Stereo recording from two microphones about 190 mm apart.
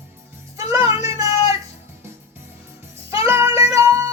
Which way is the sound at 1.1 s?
15° right (ahead or behind).